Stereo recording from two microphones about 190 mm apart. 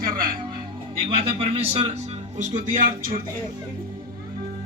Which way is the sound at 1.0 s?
30° right (ahead or behind).